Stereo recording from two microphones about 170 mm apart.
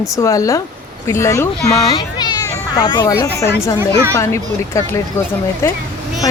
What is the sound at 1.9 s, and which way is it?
Children playing, 25° left (ahead or behind).